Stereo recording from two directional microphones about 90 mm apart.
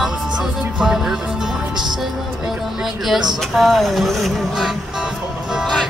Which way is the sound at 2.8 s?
5° right (ahead or behind).